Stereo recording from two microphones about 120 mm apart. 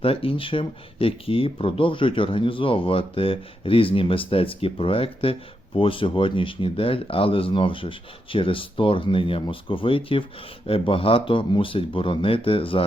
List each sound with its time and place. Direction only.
0.0 s speech: 50° left (ahead or behind)